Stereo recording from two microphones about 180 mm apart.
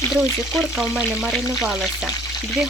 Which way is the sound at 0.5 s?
Centre (ahead or behind).